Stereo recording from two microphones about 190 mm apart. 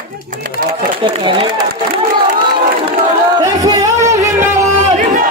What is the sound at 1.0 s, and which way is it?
Speech, 25° right (ahead or behind).